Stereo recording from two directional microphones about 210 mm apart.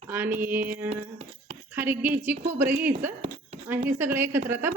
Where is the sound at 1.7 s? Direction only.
10° right (ahead or behind).